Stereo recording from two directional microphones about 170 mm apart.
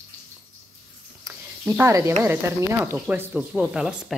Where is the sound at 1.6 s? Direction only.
15° right (ahead or behind).